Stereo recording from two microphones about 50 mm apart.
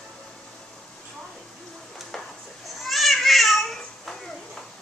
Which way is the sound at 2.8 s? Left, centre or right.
Centre.